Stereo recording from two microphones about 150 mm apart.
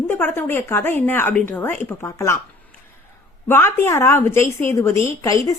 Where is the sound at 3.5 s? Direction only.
15° left (ahead or behind).